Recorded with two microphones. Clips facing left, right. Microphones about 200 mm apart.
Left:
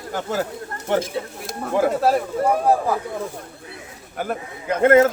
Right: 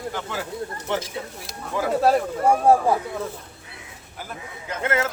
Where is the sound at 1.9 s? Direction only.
Centre (ahead or behind).